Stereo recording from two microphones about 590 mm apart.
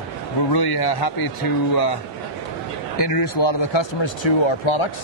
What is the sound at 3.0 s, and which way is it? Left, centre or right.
Speech, left.